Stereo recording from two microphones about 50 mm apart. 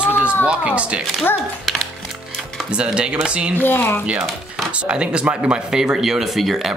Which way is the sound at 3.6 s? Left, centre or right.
Left.